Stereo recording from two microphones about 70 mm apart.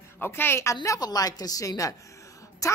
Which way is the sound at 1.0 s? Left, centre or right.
Left.